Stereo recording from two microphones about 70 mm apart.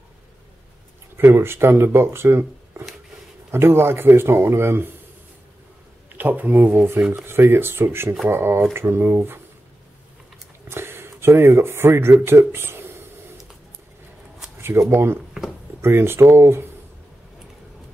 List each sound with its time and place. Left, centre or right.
1.1 s speech: right
6.1 s speech: right
10.7 s speech: right
14.6 s speech: right